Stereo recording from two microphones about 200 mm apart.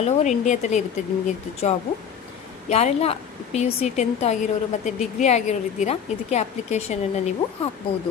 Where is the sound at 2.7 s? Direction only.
30° left (ahead or behind).